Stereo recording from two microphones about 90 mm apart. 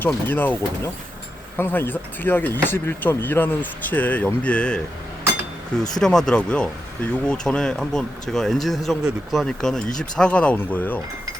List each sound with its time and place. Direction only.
0.0 s speech: 20° left (ahead or behind)
1.5 s speech: 25° left (ahead or behind)
5.9 s speech: 5° left (ahead or behind)